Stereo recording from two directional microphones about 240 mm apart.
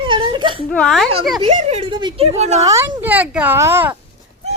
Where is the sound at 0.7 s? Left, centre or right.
Centre.